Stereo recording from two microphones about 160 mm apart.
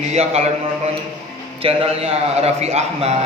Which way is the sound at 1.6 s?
35° right (ahead or behind).